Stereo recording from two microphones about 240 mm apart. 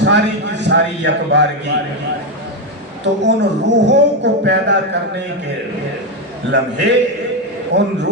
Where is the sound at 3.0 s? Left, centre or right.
Right.